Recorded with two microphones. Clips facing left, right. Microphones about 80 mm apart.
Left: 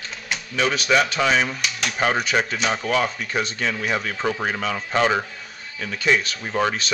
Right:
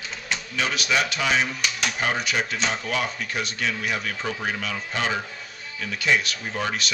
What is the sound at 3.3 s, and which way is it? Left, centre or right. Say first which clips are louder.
Speech: left 3 dB; left.